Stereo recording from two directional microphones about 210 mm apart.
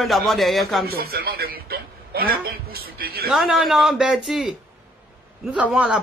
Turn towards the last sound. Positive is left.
turn(degrees=-5)  # may be behind; listen again after turning